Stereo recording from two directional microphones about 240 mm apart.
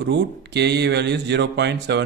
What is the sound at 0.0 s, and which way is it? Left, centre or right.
Speech, right.